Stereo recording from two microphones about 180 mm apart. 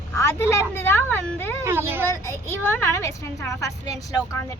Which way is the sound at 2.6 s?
15° left (ahead or behind).